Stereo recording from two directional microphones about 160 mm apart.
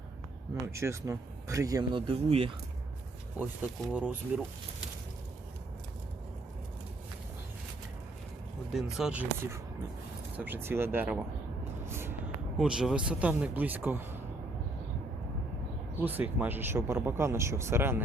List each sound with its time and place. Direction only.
0.6 s speech: 20° right (ahead or behind); by 2.5 s 35° right (ahead or behind)
3.3 s speech: 10° right (ahead or behind)
8.7 s speech: 5° right (ahead or behind)
10.3 s speech: 10° right (ahead or behind)
11.9 s vehicle: 15° right (ahead or behind)
12.5 s speech: 5° right (ahead or behind)
16.0 s speech: 10° right (ahead or behind)